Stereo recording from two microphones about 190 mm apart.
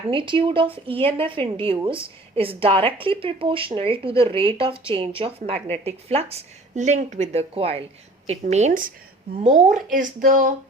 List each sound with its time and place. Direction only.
0.1 s a woman's voice: 25° right (ahead or behind); by 10.5 s 45° right (ahead or behind)